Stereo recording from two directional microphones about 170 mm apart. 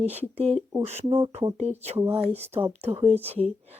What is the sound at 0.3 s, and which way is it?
Speech, 40° right (ahead or behind).